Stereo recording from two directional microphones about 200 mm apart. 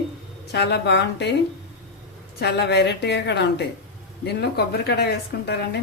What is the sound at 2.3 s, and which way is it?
Speech, 55° left (ahead or behind).